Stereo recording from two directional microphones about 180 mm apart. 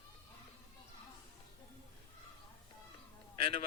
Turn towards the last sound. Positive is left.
turn(degrees=30)  # may be behind; listen again after turning